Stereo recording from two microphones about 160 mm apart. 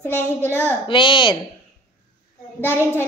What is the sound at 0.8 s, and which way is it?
Speech, 30° left (ahead or behind).